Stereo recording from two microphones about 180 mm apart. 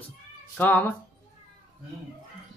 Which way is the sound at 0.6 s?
10° left (ahead or behind).